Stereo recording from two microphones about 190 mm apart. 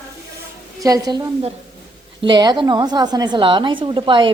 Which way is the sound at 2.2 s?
25° right (ahead or behind).